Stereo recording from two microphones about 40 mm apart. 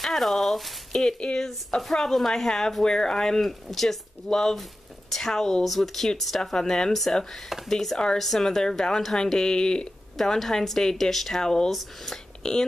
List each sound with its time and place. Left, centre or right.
0.0 s speech: centre
1.2 s speech: centre
3.4 s speech: centre
7.4 s speech: centre
7.7 s speech: centre
11.7 s speech: centre
12.4 s speech: centre